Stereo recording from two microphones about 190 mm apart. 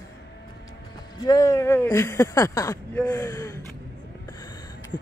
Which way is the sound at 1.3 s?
15° left (ahead or behind).